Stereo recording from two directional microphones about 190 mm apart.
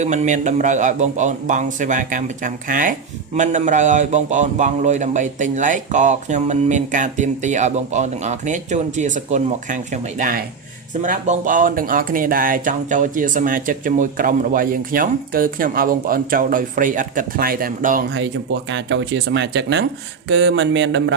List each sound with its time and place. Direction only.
0.0 s a man's voice: 40° right (ahead or behind)
18.7 s speech: 70° right (ahead or behind)